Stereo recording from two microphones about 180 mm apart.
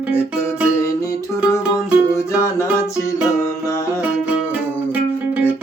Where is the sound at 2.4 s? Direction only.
15° left (ahead or behind).